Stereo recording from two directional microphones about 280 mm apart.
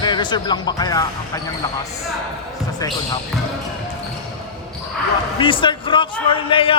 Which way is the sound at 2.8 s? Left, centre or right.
Centre.